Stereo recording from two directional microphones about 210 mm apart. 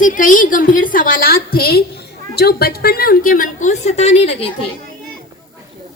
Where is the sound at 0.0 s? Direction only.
40° left (ahead or behind).